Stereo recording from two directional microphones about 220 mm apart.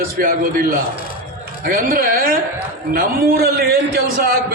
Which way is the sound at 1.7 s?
40° right (ahead or behind).